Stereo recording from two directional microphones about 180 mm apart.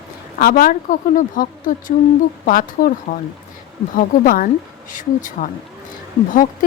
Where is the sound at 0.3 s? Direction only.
50° left (ahead or behind).